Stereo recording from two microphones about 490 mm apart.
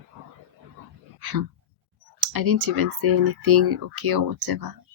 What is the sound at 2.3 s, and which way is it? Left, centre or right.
Speech, right.